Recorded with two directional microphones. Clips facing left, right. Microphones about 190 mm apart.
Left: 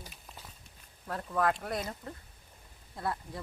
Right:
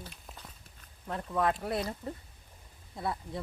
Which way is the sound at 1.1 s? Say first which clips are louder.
Even; centre (ahead or behind).